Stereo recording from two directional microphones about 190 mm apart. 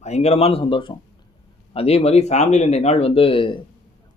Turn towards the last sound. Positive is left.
turn(degrees=25)  # may be behind; listen again after turning